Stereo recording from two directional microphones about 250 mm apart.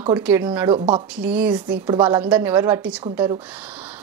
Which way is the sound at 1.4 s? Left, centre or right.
Centre.